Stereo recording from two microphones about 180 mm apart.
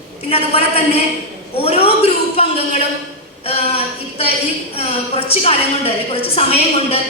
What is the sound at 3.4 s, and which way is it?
A woman's voice, 35° left (ahead or behind).